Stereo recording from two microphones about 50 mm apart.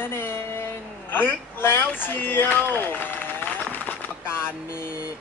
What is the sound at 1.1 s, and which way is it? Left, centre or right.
Speech, left.